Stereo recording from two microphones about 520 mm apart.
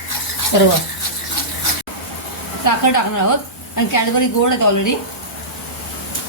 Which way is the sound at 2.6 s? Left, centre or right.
Left.